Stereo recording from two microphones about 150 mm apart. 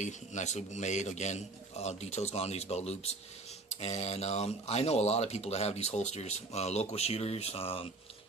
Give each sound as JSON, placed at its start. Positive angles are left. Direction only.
{"t": 0.0, "sound": "speech", "side_deg": 50}